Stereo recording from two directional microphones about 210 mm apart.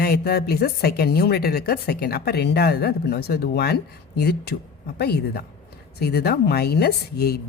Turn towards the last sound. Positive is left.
turn(degrees=45)  # may be behind; listen again after turning